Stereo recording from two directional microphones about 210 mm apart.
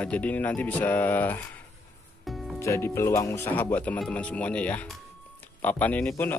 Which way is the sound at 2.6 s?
15° left (ahead or behind).